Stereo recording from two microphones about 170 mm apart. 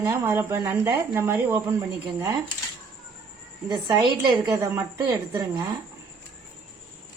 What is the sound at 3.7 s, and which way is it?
A woman's voice, 25° right (ahead or behind).